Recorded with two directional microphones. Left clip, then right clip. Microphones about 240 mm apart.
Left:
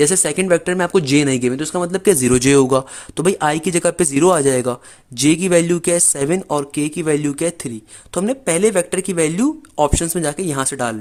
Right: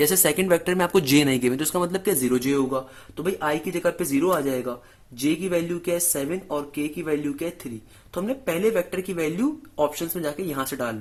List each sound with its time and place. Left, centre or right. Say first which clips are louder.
0.0 s speech: left 5 dB; left
2.2 s speech: left 10 dB; left